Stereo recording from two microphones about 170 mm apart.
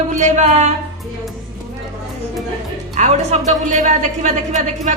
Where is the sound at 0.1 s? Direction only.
45° right (ahead or behind).